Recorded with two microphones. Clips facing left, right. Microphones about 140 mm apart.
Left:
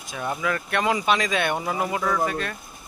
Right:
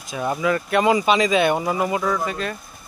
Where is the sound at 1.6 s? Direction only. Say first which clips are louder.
Right 4 dB; 20° right (ahead or behind).